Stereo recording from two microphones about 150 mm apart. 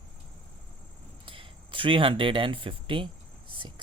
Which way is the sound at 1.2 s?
35° right (ahead or behind).